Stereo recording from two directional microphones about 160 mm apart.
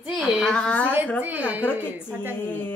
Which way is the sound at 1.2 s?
10° right (ahead or behind).